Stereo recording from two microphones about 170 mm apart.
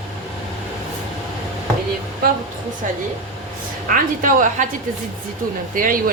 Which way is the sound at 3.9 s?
50° right (ahead or behind).